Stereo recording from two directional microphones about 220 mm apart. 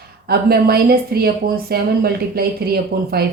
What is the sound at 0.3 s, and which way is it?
Speech, 45° right (ahead or behind).